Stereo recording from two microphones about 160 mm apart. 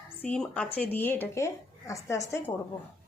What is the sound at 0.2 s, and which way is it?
A woman's voice, 10° left (ahead or behind).